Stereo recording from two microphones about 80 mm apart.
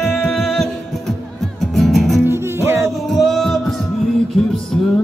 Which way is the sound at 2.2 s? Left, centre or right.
Right.